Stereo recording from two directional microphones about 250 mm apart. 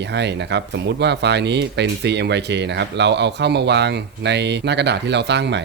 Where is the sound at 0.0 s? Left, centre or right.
Right.